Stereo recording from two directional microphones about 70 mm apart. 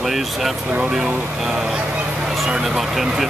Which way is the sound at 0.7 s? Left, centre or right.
Right.